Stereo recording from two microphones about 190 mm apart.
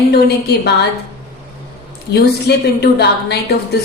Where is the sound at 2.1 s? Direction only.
60° left (ahead or behind).